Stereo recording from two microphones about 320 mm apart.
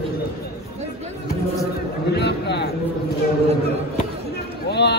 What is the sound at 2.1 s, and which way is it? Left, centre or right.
Speech, left.